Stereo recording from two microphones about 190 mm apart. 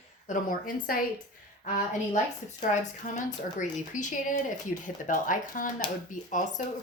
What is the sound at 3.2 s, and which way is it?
Speech, 40° left (ahead or behind).